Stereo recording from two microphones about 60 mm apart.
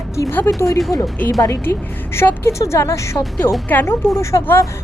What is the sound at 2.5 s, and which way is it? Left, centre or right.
A woman's voice, left.